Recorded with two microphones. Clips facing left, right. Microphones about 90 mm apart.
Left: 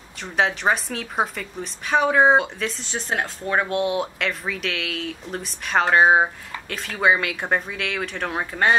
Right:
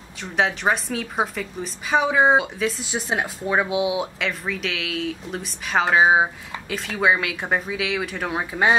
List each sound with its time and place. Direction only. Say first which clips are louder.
0.2 s a woman's voice: even; centre (ahead or behind)